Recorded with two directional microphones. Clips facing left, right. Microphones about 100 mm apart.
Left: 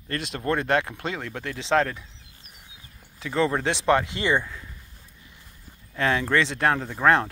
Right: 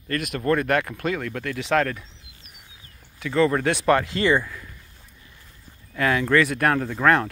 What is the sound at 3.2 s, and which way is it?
Speech, 30° left (ahead or behind).